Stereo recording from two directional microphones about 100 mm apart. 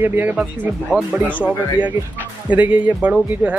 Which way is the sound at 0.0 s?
20° right (ahead or behind).